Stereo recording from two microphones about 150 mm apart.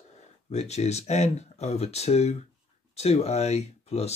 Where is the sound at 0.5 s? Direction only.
45° left (ahead or behind).